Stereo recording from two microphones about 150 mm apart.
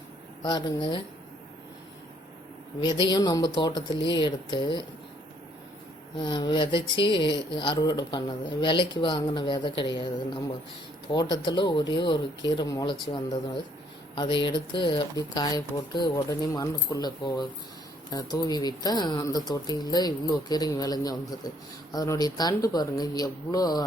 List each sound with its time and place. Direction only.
0.4 s speech: 30° left (ahead or behind)
2.8 s speech: 30° left (ahead or behind)
6.1 s speech: 30° left (ahead or behind)